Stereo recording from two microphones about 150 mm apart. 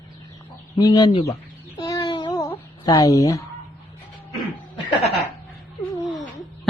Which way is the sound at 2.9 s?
20° left (ahead or behind).